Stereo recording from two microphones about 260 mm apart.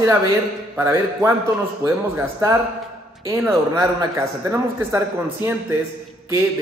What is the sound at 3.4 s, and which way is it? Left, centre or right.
A man's voice, centre.